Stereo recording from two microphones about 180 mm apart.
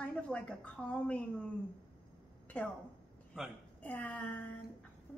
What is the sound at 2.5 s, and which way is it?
Speech, 5° left (ahead or behind).